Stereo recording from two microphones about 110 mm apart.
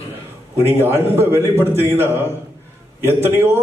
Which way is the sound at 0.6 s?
20° right (ahead or behind).